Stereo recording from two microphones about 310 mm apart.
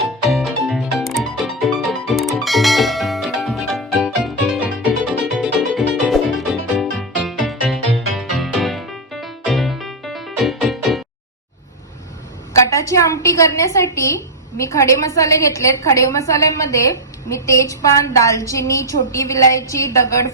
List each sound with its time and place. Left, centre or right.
0.0 s music: centre
12.6 s a sound: centre
14.6 s a woman's voice: centre